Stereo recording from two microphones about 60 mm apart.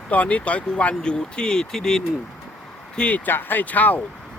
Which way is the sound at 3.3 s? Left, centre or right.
Left.